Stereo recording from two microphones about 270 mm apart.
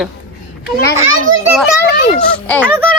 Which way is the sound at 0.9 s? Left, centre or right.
Right.